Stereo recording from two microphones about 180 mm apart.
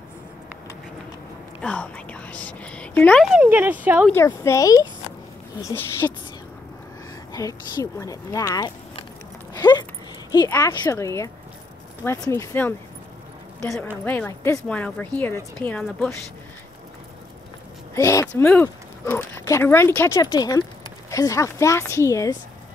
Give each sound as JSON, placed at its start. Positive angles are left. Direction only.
{"t": 1.6, "sound": "speech", "side_deg": 5}
{"t": 3.3, "sound": "speech", "side_deg": -10}
{"t": 4.1, "sound": "speech", "side_deg": 15}
{"t": 7.3, "sound": "speech", "side_deg": 20}
{"t": 9.5, "sound": "dog", "side_deg": 20}
{"t": 10.5, "sound": "a woman's voice", "side_deg": 20}
{"t": 17.9, "sound": "speech", "side_deg": 15}